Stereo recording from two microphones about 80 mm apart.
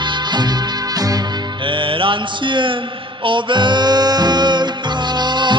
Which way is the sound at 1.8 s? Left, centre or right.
Right.